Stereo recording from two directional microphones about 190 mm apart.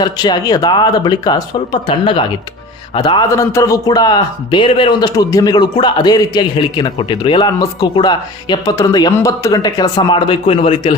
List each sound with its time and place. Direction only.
0.0 s a man's voice: 20° left (ahead or behind)